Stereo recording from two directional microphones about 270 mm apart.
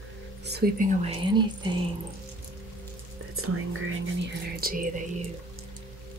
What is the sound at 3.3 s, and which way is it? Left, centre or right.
Whispering, right.